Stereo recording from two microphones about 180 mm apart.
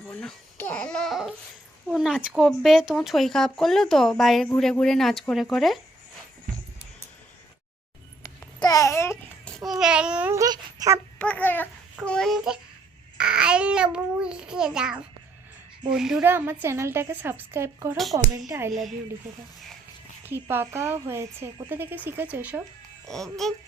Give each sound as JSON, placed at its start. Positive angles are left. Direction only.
{"t": 0.0, "sound": "speech", "side_deg": 5}
{"t": 8.2, "sound": "babbling", "side_deg": 20}
{"t": 9.6, "sound": "speech", "side_deg": -5}
{"t": 10.3, "sound": "a child's voice", "side_deg": -20}
{"t": 11.2, "sound": "babbling", "side_deg": 10}
{"t": 11.9, "sound": "speech", "side_deg": 5}
{"t": 17.9, "sound": "speech", "side_deg": 0}
{"t": 18.3, "sound": "speech", "side_deg": -15}
{"t": 18.7, "sound": "speech", "side_deg": 0}
{"t": 20.2, "sound": "speech", "side_deg": -10}
{"t": 23.0, "sound": "speech", "side_deg": 0}